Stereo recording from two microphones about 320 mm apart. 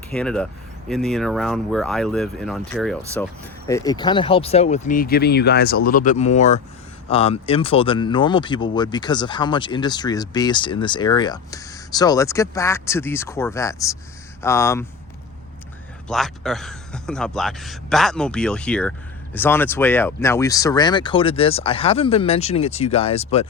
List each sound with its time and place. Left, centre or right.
0.1 s speech: centre
16.0 s speech: centre